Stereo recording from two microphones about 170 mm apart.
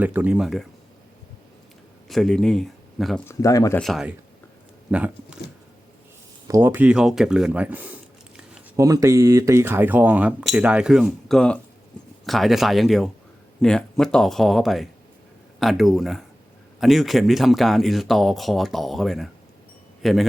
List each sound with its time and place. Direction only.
0.0 s speech: 10° right (ahead or behind)
2.0 s speech: centre (ahead or behind)
3.2 s speech: 20° left (ahead or behind)
3.8 s speech: centre (ahead or behind)
6.5 s speech: 15° right (ahead or behind)